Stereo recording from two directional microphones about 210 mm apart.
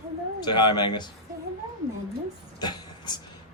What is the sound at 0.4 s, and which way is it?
Speech, 20° left (ahead or behind).